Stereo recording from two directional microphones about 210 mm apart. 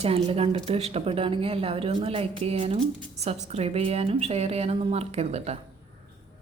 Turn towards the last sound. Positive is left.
turn(degrees=-30)  # may be behind; listen again after turning